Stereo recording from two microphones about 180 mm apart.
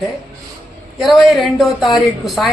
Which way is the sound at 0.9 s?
Centre (ahead or behind).